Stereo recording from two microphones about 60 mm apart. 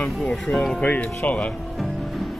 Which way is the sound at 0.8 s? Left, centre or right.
Left.